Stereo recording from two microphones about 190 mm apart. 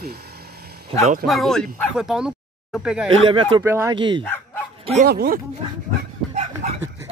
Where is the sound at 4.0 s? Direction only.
25° right (ahead or behind).